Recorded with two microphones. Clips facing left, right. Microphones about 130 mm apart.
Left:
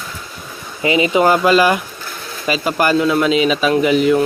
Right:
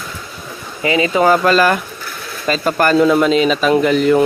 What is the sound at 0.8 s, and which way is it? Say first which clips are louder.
Speech: left 1 dB; 20° left (ahead or behind).